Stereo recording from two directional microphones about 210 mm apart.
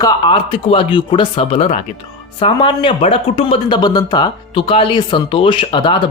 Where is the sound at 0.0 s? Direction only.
25° left (ahead or behind).